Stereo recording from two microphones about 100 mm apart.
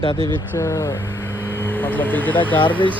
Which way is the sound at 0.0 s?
55° left (ahead or behind).